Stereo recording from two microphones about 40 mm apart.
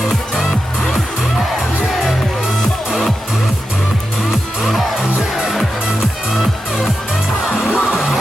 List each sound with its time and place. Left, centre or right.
4.3 s music: centre
7.7 s music: right